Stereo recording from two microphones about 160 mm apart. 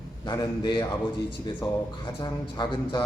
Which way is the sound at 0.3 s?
30° left (ahead or behind).